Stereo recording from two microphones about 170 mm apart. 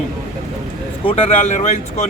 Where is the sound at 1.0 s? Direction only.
40° left (ahead or behind).